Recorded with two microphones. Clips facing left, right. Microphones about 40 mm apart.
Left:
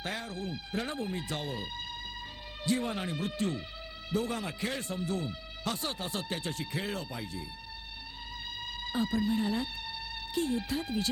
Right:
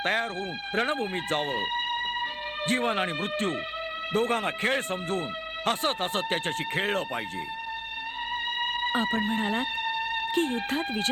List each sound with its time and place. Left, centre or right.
0.0 s speech: right
8.5 s speech: right